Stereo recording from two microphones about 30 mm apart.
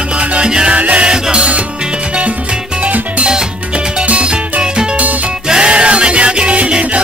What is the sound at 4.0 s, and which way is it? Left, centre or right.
Music, right.